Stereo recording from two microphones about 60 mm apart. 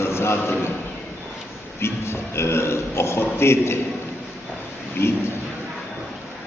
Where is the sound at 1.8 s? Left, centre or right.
Left.